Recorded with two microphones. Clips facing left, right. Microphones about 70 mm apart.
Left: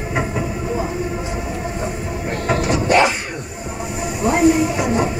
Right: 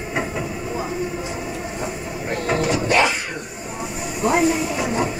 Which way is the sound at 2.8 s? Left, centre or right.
Left.